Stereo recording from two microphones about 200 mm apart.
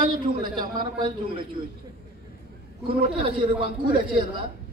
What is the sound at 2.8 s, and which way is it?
Speech, 25° right (ahead or behind).